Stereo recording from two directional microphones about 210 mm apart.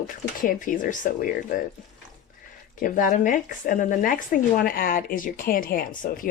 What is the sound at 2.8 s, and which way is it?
Speech, 40° left (ahead or behind).